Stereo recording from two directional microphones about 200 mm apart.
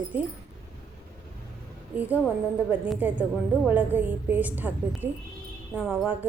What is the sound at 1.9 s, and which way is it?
Speech, 10° right (ahead or behind).